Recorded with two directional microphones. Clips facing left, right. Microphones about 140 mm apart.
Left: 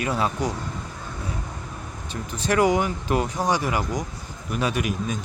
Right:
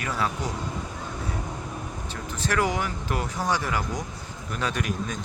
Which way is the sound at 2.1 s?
15° left (ahead or behind).